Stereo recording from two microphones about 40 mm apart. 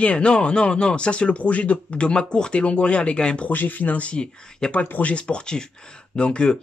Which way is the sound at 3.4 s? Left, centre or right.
Left.